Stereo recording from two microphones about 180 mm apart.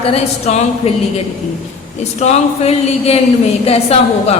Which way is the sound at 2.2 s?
35° left (ahead or behind).